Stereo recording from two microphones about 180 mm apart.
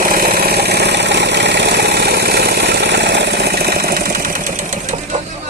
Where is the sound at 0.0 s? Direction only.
55° right (ahead or behind).